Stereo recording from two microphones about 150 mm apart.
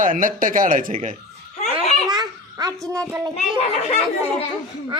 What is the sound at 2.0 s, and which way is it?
Babbling, 25° right (ahead or behind).